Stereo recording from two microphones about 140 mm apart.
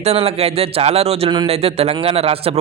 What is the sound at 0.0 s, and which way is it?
Speech, 45° right (ahead or behind).